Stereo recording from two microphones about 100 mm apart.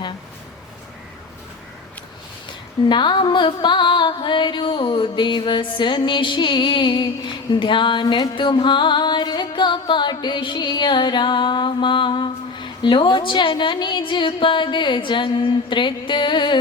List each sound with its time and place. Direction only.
2.9 s music: 50° left (ahead or behind)